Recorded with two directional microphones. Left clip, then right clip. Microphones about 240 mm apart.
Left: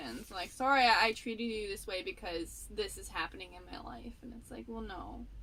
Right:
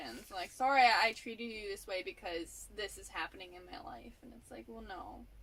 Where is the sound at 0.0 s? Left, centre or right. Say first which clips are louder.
Left 1 dB; centre.